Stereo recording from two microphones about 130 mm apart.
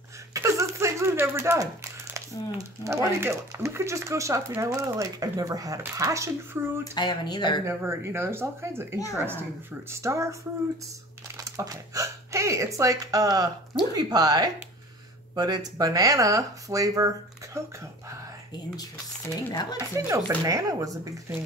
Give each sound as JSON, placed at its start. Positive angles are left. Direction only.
{"t": 0.3, "sound": "a sound", "side_deg": -25}
{"t": 2.1, "sound": "speech", "side_deg": -25}
{"t": 6.8, "sound": "speech", "side_deg": 30}
{"t": 7.6, "sound": "speech", "side_deg": -20}
{"t": 11.3, "sound": "speech", "side_deg": -25}
{"t": 19.5, "sound": "speech", "side_deg": 30}
{"t": 20.1, "sound": "speech", "side_deg": -25}